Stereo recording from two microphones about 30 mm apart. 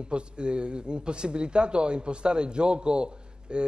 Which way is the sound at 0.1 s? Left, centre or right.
Right.